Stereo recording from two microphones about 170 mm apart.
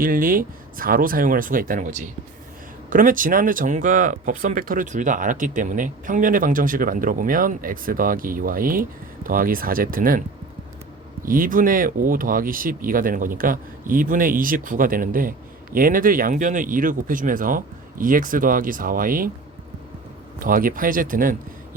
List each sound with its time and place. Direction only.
0.0 s speech: 55° right (ahead or behind)
11.3 s speech: 55° right (ahead or behind)
20.4 s speech: 55° right (ahead or behind)